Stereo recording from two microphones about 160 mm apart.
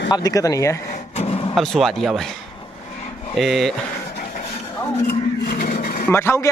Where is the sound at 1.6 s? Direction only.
Centre (ahead or behind).